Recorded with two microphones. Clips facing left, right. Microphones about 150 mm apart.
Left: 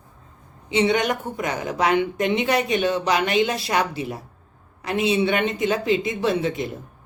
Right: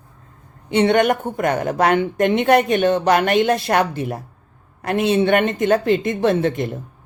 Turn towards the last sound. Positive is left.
turn(degrees=-55)  # may be behind; listen again after turning